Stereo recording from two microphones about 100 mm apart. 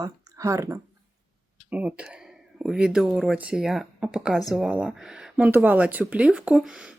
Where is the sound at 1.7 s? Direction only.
15° right (ahead or behind).